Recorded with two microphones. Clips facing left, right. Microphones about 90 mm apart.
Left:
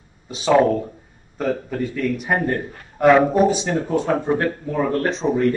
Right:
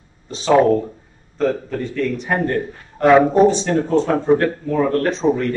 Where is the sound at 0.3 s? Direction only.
5° left (ahead or behind).